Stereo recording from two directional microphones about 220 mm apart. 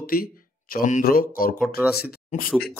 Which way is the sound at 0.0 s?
40° left (ahead or behind).